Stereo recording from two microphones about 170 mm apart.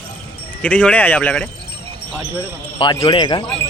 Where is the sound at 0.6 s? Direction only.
10° left (ahead or behind).